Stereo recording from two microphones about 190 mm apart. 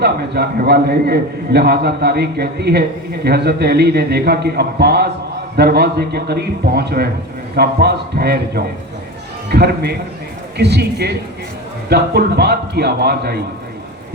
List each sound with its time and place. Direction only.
0.0 s a man's voice: 60° right (ahead or behind)